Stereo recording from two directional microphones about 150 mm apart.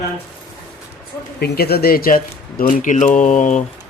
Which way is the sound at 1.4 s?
90° left.